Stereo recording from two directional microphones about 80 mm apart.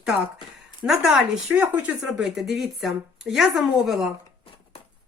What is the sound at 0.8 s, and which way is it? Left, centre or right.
Speech, centre.